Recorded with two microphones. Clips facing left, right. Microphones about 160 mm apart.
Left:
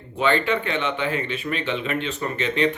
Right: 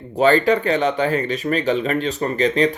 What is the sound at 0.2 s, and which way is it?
Speech, 40° right (ahead or behind).